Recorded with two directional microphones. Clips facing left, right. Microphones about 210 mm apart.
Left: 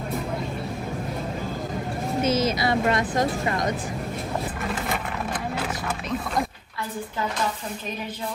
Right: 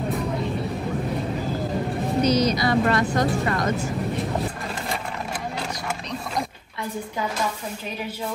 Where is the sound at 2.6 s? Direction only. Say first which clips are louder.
Right 2 dB; 20° left (ahead or behind).